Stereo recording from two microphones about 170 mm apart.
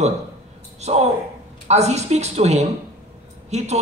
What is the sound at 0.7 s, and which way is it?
A man's voice, 40° right (ahead or behind).